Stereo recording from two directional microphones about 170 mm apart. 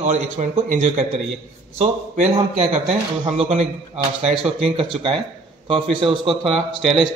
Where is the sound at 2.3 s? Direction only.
35° right (ahead or behind).